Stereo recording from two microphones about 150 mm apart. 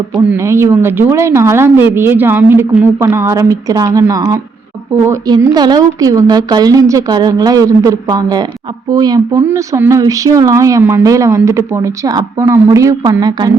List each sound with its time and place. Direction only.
0.3 s speech: 15° right (ahead or behind)